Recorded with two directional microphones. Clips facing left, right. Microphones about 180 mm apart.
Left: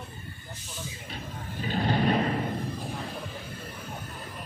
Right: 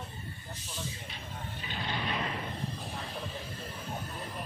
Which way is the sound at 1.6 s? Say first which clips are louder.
Left 12 dB; 45° left (ahead or behind).